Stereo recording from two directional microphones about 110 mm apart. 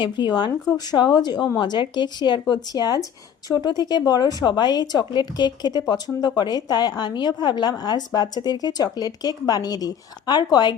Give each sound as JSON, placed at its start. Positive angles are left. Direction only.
{"t": 0.0, "sound": "a woman's voice", "side_deg": 45}